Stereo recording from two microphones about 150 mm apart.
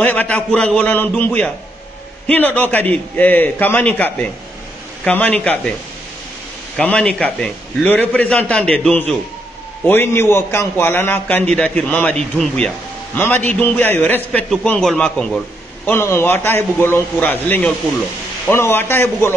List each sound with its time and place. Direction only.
0.0 s a man's voice: 10° left (ahead or behind)
6.8 s a man's voice: 10° left (ahead or behind)